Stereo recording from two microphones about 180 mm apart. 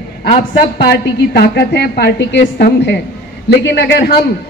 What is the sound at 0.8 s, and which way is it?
A woman's voice, 60° left (ahead or behind).